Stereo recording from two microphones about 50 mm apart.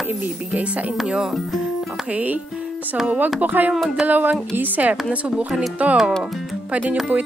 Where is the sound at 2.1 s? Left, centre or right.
Right.